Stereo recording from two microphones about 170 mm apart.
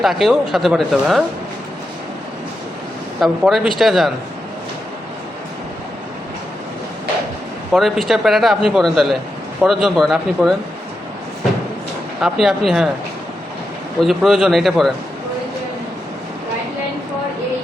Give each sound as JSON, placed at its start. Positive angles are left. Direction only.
{"t": 0.0, "sound": "speech", "side_deg": 0}
{"t": 3.2, "sound": "speech", "side_deg": 0}
{"t": 7.7, "sound": "speech", "side_deg": 0}
{"t": 12.2, "sound": "speech", "side_deg": 0}
{"t": 14.0, "sound": "speech", "side_deg": 0}